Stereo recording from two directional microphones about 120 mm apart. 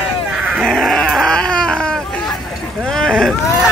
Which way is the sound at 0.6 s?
Centre (ahead or behind).